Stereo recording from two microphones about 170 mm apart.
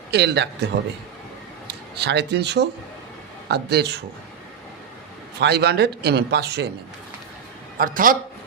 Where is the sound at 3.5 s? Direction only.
75° right (ahead or behind).